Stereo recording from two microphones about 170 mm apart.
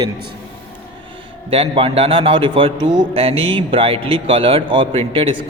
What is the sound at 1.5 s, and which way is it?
A man's voice, 35° right (ahead or behind).